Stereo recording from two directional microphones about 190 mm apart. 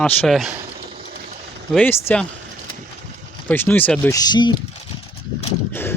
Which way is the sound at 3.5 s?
10° left (ahead or behind).